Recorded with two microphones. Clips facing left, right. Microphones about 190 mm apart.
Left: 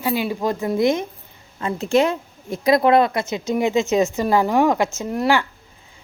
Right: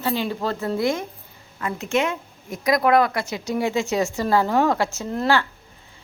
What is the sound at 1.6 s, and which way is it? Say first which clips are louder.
A woman's voice: left 5 dB; 35° left (ahead or behind).